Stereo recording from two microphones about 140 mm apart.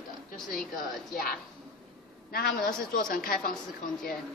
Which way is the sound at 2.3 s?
90° left.